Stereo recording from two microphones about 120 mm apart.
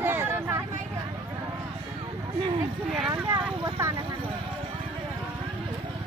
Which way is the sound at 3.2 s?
25° right (ahead or behind).